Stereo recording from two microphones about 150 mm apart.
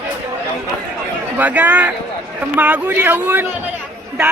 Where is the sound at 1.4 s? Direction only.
10° right (ahead or behind).